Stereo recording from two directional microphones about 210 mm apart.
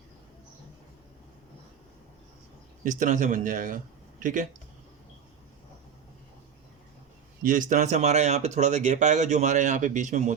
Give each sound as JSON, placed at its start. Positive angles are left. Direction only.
{"t": 2.8, "sound": "speech", "side_deg": -35}
{"t": 7.4, "sound": "speech", "side_deg": -40}